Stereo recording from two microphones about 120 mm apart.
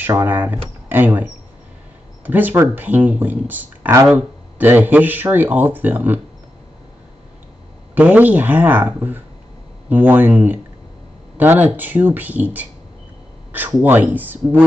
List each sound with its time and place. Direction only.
0.0 s speech: 15° right (ahead or behind)
7.9 s speech: 15° right (ahead or behind)